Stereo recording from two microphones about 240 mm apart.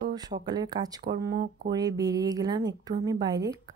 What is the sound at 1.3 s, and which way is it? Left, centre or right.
Speech, right.